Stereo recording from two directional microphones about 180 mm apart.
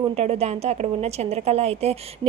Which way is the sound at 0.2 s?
35° right (ahead or behind).